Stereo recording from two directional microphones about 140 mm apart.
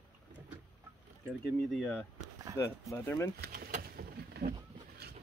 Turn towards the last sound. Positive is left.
turn(degrees=-90)